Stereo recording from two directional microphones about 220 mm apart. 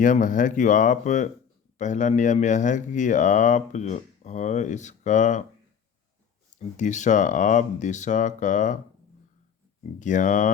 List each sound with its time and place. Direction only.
0.0 s speech: 35° left (ahead or behind)
6.7 s speech: 35° left (ahead or behind)
10.0 s speech: 35° left (ahead or behind)